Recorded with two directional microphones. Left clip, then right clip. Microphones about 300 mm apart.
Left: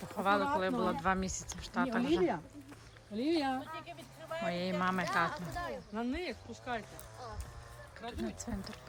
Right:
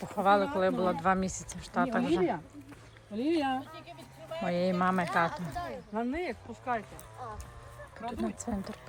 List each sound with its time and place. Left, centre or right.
0.0 s speech: centre
3.1 s speech: centre
3.6 s speech: centre
5.9 s speech: right
8.2 s speech: centre